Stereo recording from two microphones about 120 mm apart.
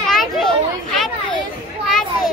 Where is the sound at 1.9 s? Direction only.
5° left (ahead or behind).